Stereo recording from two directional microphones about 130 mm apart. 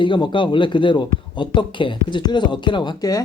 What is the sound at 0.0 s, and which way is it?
Speech, 35° left (ahead or behind).